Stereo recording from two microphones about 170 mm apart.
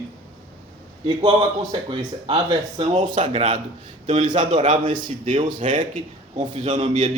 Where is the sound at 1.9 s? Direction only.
30° right (ahead or behind).